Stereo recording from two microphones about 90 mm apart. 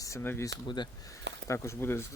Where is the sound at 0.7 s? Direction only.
55° left (ahead or behind).